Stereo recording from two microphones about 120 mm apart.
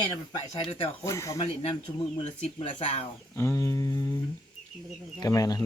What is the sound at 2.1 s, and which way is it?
Speech, 50° left (ahead or behind).